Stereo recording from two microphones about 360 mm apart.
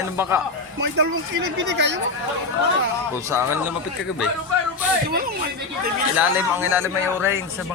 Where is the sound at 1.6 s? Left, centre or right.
Right.